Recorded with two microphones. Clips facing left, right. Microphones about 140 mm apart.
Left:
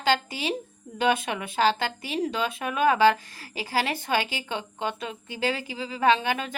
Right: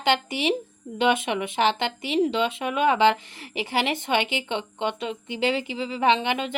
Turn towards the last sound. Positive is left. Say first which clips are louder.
# right 1 dB
turn(degrees=-20)  # may be behind; listen again after turning